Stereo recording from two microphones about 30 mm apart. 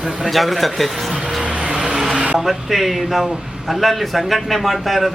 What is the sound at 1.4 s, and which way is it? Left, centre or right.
Vehicle, right.